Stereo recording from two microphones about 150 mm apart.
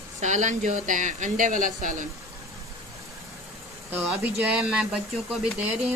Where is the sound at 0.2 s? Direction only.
55° right (ahead or behind).